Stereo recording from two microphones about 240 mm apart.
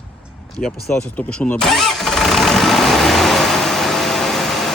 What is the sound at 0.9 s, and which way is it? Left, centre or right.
Vehicle, centre.